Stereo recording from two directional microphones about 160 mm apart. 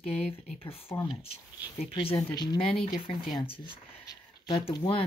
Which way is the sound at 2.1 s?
25° left (ahead or behind).